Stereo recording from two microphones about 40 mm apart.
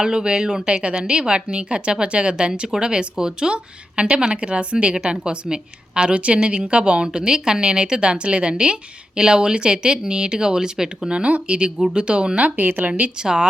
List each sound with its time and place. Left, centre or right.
0.0 s a woman's voice: right
11.4 s a woman's voice: right
12.4 s speech: right
13.1 s a woman's voice: right